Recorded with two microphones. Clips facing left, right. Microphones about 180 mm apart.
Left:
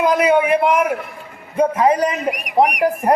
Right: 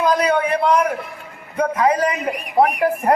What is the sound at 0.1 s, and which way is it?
A man's voice, 20° left (ahead or behind).